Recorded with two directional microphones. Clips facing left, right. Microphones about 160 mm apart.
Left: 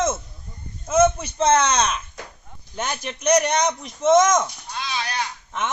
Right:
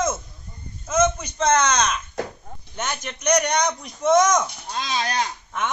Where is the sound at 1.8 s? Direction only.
5° left (ahead or behind).